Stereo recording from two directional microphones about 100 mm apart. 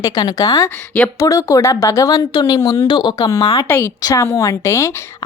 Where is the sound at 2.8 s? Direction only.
50° left (ahead or behind).